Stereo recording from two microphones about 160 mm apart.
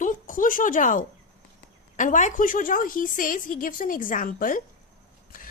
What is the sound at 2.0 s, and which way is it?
A woman's voice, 55° left (ahead or behind).